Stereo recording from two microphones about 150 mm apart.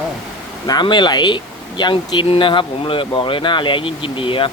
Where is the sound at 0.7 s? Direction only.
30° left (ahead or behind).